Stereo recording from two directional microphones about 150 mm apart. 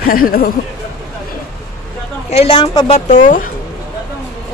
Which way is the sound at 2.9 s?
65° left (ahead or behind).